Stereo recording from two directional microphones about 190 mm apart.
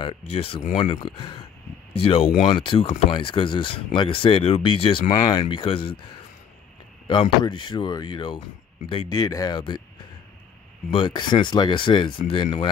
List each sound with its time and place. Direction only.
0.0 s speech: 30° left (ahead or behind)
7.1 s speech: 25° left (ahead or behind)
10.9 s speech: 25° left (ahead or behind)